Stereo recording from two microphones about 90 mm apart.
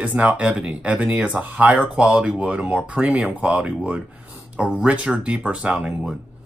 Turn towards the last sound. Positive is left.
turn(degrees=-10)  # may be behind; listen again after turning